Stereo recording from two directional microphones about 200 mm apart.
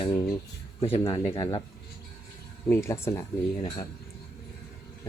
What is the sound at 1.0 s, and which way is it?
Speech, 15° left (ahead or behind).